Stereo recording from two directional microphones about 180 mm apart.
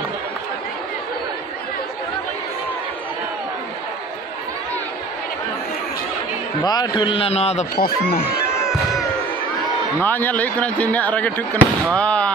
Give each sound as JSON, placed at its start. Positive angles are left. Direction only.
{"t": 6.6, "sound": "a man's voice", "side_deg": 25}
{"t": 7.7, "sound": "speech", "side_deg": 55}
{"t": 10.0, "sound": "speech", "side_deg": 10}